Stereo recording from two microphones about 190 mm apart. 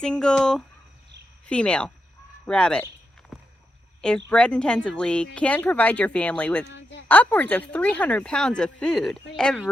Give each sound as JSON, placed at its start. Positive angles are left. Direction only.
{"t": 0.0, "sound": "a woman's voice", "side_deg": 5}
{"t": 4.3, "sound": "speech", "side_deg": 5}
{"t": 6.7, "sound": "speech", "side_deg": 65}
{"t": 7.1, "sound": "a woman's voice", "side_deg": 10}